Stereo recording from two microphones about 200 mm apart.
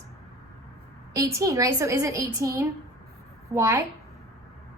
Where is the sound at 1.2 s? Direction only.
15° right (ahead or behind).